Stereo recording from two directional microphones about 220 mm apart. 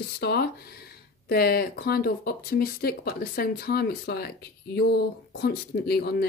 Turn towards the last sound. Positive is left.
turn(degrees=45)  # may be behind; listen again after turning